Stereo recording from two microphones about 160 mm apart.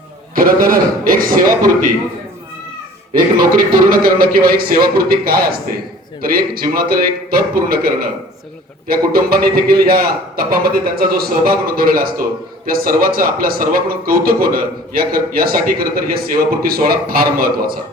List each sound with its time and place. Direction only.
0.3 s speech: 65° right (ahead or behind)
3.1 s a man's voice: 60° right (ahead or behind)